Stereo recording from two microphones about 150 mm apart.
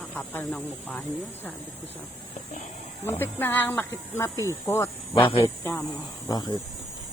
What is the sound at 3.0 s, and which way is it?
Speech, 15° left (ahead or behind).